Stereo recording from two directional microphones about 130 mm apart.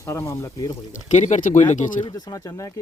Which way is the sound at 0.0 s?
25° left (ahead or behind).